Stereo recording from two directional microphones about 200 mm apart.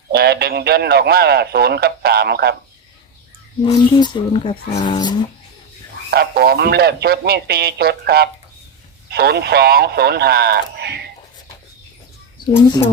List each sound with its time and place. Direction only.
0.1 s speech: 55° right (ahead or behind)
3.6 s speech: 25° left (ahead or behind)
6.1 s speech: 50° right (ahead or behind)